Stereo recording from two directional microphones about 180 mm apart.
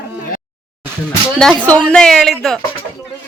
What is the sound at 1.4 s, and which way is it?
Speech, 5° left (ahead or behind).